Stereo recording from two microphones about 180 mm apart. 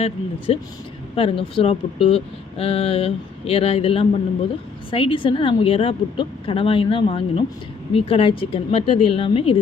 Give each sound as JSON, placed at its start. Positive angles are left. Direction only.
{"t": 0.0, "sound": "a woman's voice", "side_deg": 30}